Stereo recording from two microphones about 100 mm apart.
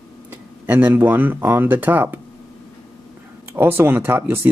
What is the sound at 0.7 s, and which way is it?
Speech, 20° right (ahead or behind).